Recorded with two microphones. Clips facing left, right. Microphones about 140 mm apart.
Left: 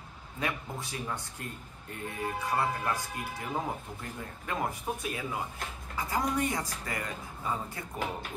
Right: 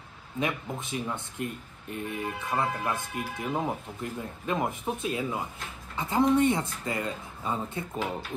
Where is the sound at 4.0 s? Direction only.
20° right (ahead or behind).